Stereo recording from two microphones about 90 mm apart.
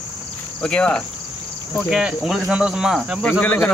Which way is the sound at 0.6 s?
10° left (ahead or behind).